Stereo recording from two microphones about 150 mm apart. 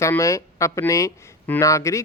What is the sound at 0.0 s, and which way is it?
Speech, 20° left (ahead or behind).